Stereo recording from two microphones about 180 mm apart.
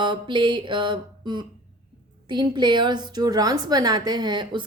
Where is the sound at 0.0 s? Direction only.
25° right (ahead or behind).